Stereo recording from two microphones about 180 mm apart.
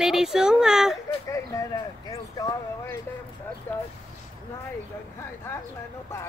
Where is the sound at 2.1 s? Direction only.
20° left (ahead or behind).